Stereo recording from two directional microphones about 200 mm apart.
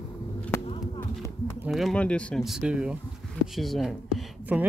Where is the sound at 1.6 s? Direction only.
Centre (ahead or behind).